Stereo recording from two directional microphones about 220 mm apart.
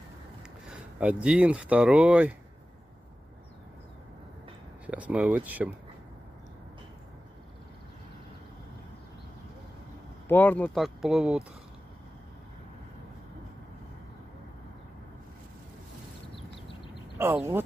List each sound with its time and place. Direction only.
0.7 s speech: 5° right (ahead or behind)
4.8 s speech: 5° right (ahead or behind)
10.2 s speech: 10° left (ahead or behind)
17.2 s speech: 10° right (ahead or behind)